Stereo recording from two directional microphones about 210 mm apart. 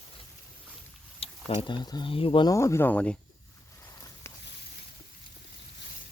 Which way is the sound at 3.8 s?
15° left (ahead or behind).